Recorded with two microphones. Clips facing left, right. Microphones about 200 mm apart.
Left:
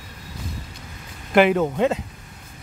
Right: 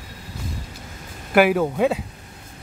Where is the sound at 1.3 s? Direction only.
5° right (ahead or behind).